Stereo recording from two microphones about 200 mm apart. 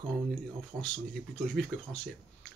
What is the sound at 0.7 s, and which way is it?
Speech, 15° right (ahead or behind).